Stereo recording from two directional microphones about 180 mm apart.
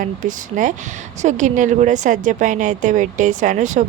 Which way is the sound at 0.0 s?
45° right (ahead or behind).